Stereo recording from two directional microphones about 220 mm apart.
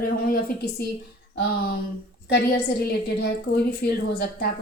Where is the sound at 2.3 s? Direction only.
50° left (ahead or behind).